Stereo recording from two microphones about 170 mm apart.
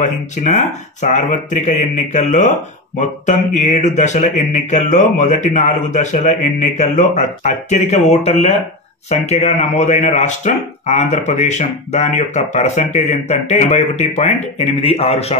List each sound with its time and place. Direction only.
0.0 s speech: 45° left (ahead or behind)